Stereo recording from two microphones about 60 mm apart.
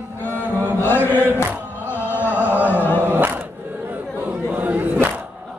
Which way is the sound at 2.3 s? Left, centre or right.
Right.